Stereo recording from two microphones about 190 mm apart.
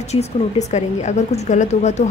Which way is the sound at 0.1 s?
35° left (ahead or behind).